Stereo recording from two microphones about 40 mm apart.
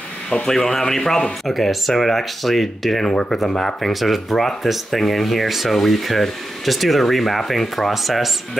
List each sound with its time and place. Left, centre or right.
0.3 s speech: centre
3.1 s speech: centre
3.9 s speech: centre